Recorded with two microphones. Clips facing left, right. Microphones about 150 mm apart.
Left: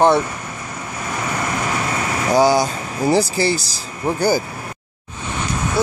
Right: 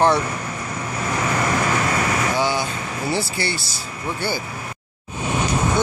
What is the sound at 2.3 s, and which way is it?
Air conditioning, 40° left (ahead or behind).